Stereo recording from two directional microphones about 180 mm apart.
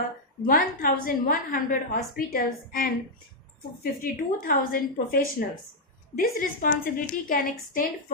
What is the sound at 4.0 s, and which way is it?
A woman's voice, 50° left (ahead or behind).